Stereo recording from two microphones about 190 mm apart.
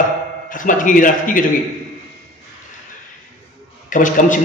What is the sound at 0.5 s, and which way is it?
A man's voice, 45° left (ahead or behind).